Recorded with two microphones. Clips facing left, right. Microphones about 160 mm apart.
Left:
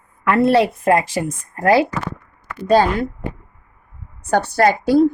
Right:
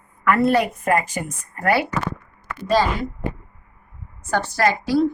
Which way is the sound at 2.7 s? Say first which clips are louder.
Left 5 dB; 55° left (ahead or behind).